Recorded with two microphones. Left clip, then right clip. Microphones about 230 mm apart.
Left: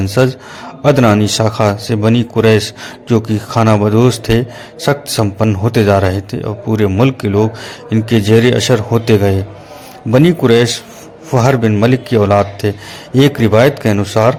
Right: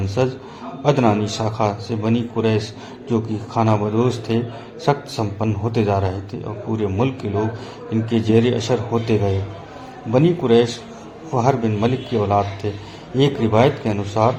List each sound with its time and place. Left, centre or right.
0.2 s a man's voice: left